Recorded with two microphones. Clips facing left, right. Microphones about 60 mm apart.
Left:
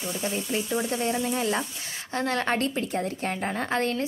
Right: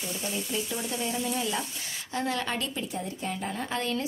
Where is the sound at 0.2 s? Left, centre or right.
Left.